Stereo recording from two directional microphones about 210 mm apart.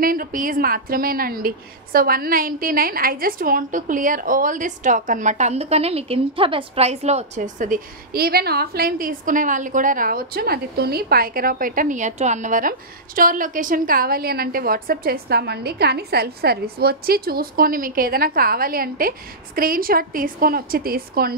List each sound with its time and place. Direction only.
0.0 s a woman's voice: 45° right (ahead or behind)